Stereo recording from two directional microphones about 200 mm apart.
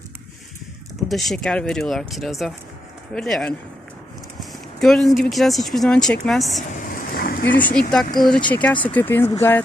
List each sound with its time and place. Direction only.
1.0 s speech: centre (ahead or behind)
4.8 s speech: centre (ahead or behind)
6.6 s a sound: 45° left (ahead or behind)
7.4 s speech: 10° left (ahead or behind)